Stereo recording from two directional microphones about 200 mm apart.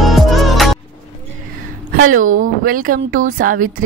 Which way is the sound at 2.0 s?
90° right.